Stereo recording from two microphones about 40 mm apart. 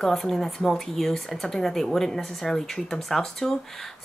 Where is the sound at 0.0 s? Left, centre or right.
Centre.